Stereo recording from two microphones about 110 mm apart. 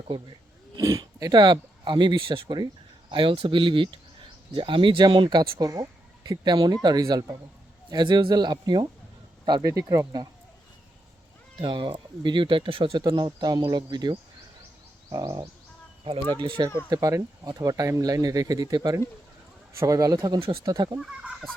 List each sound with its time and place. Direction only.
0.8 s speech: 30° right (ahead or behind)
9.6 s speech: 25° right (ahead or behind)
11.6 s speech: 45° right (ahead or behind)
12.9 s speech: 40° right (ahead or behind)
16.3 s speech: 50° right (ahead or behind)
16.9 s speech: 30° right (ahead or behind)
21.0 s speech: centre (ahead or behind)